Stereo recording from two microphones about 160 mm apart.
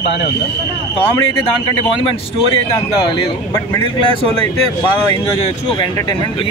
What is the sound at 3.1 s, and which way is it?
Speech, 20° left (ahead or behind).